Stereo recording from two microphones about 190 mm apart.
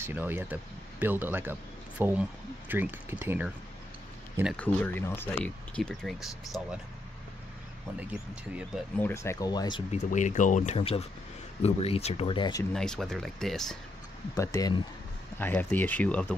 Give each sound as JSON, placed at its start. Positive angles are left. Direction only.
{"t": 0.0, "sound": "speech", "side_deg": -10}
{"t": 4.6, "sound": "speech", "side_deg": 10}
{"t": 9.0, "sound": "speech", "side_deg": 15}
{"t": 9.8, "sound": "speech", "side_deg": 40}
{"t": 12.7, "sound": "speech", "side_deg": 5}
{"t": 14.3, "sound": "speech", "side_deg": 15}